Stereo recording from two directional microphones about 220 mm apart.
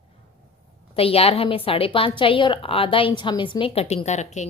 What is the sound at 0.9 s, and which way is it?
A woman's voice, 25° left (ahead or behind).